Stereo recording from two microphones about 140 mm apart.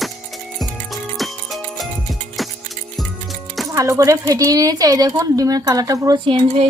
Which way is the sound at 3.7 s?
25° right (ahead or behind).